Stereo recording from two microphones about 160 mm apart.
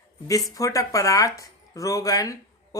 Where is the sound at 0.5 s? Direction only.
20° left (ahead or behind).